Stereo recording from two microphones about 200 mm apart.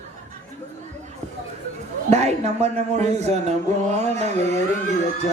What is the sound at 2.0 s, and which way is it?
Speech, 35° right (ahead or behind).